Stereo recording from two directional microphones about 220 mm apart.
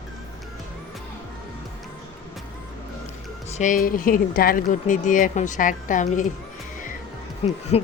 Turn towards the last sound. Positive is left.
turn(degrees=25)  # may be behind; listen again after turning